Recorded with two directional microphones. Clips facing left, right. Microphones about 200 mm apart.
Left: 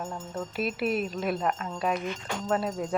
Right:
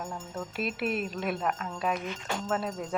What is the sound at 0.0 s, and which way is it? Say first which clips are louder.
Speech: left 2 dB; centre (ahead or behind).